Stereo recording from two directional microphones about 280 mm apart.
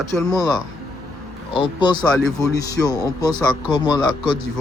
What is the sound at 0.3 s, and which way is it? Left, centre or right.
Speech, centre.